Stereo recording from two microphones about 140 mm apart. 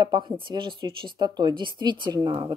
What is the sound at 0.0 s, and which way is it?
Speech, 35° right (ahead or behind).